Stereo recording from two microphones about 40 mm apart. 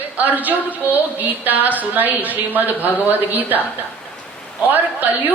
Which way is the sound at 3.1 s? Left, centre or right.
Right.